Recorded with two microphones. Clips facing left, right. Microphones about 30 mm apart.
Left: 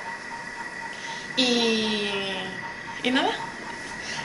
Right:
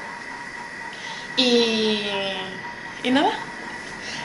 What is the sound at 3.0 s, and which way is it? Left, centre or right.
Speech, centre.